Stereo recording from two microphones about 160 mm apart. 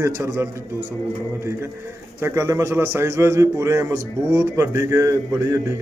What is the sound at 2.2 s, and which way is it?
A man's voice, 15° right (ahead or behind).